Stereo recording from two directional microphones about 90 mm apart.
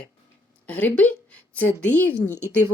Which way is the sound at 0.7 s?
15° left (ahead or behind).